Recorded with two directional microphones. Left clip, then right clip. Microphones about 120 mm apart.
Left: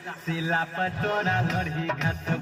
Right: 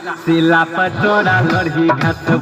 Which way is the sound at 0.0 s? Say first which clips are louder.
Right 17 dB; 20° right (ahead or behind).